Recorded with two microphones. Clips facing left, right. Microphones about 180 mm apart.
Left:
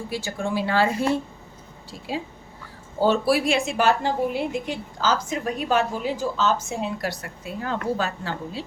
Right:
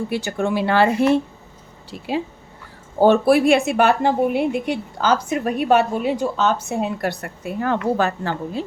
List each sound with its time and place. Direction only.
0.1 s a woman's voice: 65° right (ahead or behind)
3.0 s a woman's voice: 55° right (ahead or behind)